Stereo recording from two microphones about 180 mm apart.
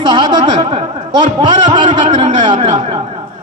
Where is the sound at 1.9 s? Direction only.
40° right (ahead or behind).